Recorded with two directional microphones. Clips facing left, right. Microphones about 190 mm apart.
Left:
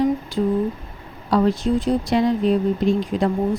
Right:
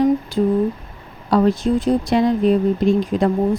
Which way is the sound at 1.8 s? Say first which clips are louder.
Right 3 dB; 50° right (ahead or behind).